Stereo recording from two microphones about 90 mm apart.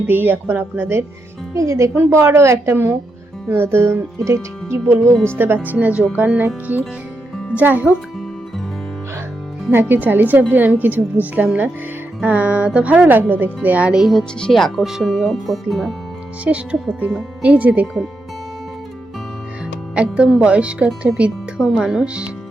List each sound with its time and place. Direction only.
0.1 s a woman's voice: 20° right (ahead or behind)
5.1 s speech: 10° left (ahead or behind)
5.6 s speech: 15° right (ahead or behind)
9.7 s speech: 20° right (ahead or behind); by 16.0 s centre (ahead or behind)
16.4 s speech: 15° right (ahead or behind)
20.0 s speech: 10° right (ahead or behind)